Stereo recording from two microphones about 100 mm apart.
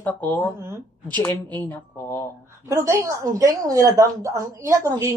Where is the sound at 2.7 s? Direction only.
30° right (ahead or behind).